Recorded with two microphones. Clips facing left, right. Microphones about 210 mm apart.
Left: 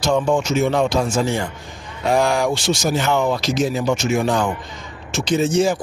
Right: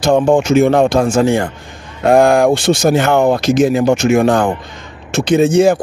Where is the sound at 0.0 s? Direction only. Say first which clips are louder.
Right 7 dB; 55° right (ahead or behind).